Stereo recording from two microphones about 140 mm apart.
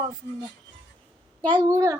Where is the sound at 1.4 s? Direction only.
30° right (ahead or behind).